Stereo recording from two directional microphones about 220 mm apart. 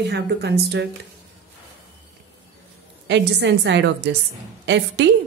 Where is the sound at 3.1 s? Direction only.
50° right (ahead or behind).